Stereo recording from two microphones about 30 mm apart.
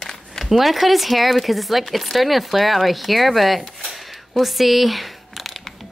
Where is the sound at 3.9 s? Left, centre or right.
Centre.